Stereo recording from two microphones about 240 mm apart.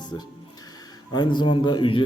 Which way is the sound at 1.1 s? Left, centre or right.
Centre.